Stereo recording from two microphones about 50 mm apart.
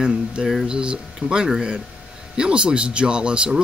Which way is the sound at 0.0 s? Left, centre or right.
Right.